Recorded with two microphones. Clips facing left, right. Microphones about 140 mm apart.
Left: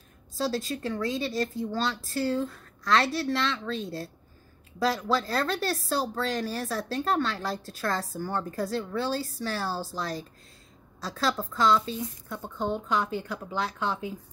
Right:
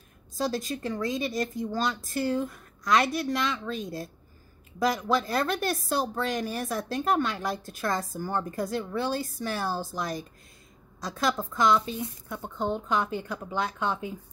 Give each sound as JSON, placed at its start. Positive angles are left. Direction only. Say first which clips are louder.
{"t": 0.4, "sound": "speech", "louder": "even", "side_deg": -15}
{"t": 12.7, "sound": "a woman's voice", "louder": "even", "side_deg": 0}
{"t": 13.4, "sound": "speech", "louder": "right 1 dB", "side_deg": -15}